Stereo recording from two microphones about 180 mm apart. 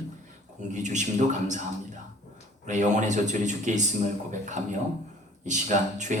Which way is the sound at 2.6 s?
40° right (ahead or behind).